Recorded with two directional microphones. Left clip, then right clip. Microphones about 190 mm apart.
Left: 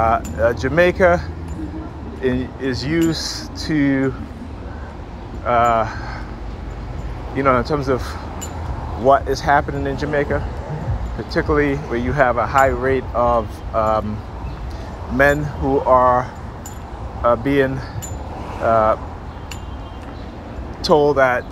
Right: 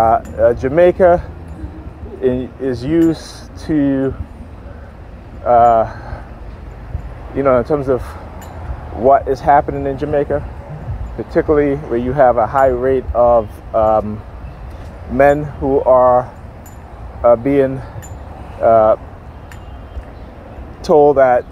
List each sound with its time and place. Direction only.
0.0 s speech: 45° right (ahead or behind)
2.7 s speech: 45° right (ahead or behind)
5.4 s speech: 40° right (ahead or behind)
7.3 s speech: 40° right (ahead or behind)
9.0 s speech: 40° right (ahead or behind)
15.1 s speech: 40° right (ahead or behind)
20.9 s speech: 45° right (ahead or behind)